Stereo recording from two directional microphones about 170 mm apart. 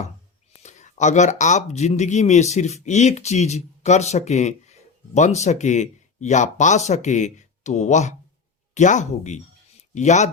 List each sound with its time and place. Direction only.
0.6 s speech: 45° left (ahead or behind)